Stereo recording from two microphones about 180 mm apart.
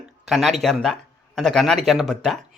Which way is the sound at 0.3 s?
Centre (ahead or behind).